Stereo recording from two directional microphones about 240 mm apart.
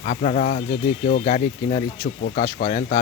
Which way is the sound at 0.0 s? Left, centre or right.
Left.